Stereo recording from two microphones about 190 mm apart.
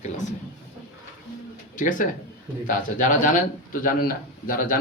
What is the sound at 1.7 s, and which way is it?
A man's voice, 45° left (ahead or behind).